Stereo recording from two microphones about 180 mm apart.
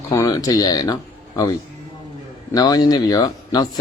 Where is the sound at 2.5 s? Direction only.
20° left (ahead or behind).